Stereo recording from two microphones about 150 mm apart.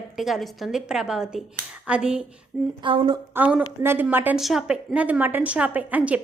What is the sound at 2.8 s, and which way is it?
Speech, 35° right (ahead or behind).